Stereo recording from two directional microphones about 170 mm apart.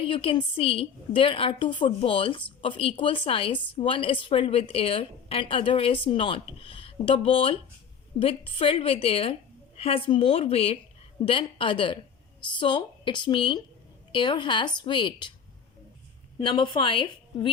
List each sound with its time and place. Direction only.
0.0 s a woman's voice: 30° left (ahead or behind)
16.4 s a woman's voice: 30° left (ahead or behind)